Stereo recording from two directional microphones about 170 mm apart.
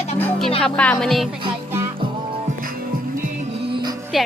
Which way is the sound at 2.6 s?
55° right (ahead or behind).